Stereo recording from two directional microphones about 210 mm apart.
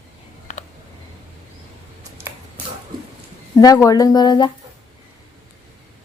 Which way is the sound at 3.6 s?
15° left (ahead or behind).